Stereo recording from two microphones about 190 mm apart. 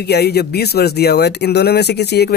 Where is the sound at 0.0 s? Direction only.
60° left (ahead or behind).